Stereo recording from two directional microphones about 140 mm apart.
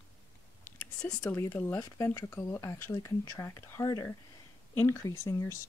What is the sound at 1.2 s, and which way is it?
Speech, 15° left (ahead or behind).